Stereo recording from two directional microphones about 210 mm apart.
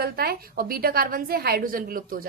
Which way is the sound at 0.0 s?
50° right (ahead or behind).